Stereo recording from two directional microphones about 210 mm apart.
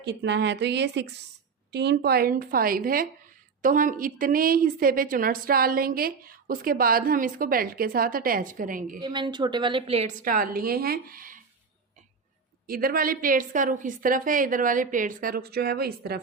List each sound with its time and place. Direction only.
0.0 s a woman's voice: 55° right (ahead or behind)
9.0 s a woman's voice: 20° right (ahead or behind)
10.2 s a woman's voice: 45° right (ahead or behind)
12.6 s a woman's voice: 45° right (ahead or behind)